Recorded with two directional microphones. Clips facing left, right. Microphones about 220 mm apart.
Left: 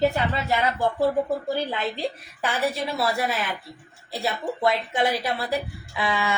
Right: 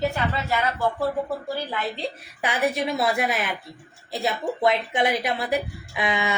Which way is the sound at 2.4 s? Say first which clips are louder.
Right 2 dB; 15° right (ahead or behind).